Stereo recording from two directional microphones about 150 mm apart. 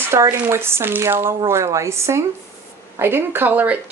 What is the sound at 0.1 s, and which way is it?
Speech, 15° right (ahead or behind).